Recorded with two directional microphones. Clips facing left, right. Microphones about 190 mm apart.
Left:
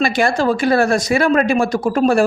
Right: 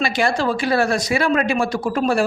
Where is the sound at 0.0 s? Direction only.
50° left (ahead or behind).